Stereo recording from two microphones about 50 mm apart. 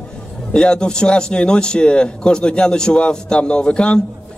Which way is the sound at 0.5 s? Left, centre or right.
Centre.